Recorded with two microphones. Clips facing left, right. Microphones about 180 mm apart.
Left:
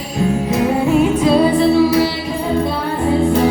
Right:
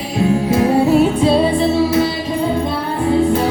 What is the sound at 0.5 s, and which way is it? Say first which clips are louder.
Music: right 2 dB; 30° right (ahead or behind).